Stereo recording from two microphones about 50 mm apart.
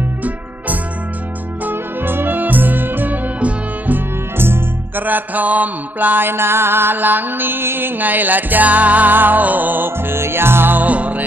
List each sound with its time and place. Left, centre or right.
1.6 s music: right
3.3 s music: right
4.4 s music: right
5.0 s mantra: right